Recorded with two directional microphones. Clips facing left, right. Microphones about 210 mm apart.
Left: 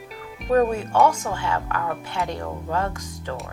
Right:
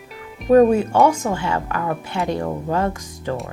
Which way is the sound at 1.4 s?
15° right (ahead or behind).